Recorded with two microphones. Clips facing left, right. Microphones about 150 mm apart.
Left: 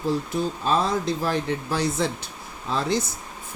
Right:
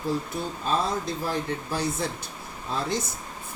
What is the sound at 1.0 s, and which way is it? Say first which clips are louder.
Speech: left 4 dB; 90° left.